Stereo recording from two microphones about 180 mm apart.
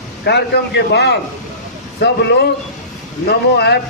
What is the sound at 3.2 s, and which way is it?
Speech, 65° left (ahead or behind).